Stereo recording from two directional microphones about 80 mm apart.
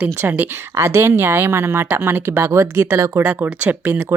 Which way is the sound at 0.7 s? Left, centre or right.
Right.